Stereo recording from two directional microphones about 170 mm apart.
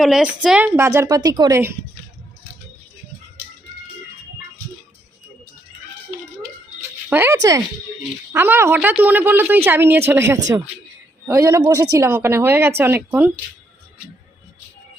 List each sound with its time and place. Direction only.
0.0 s a woman's voice: 5° right (ahead or behind)
0.8 s speech: 15° right (ahead or behind)
7.1 s speech: 15° right (ahead or behind)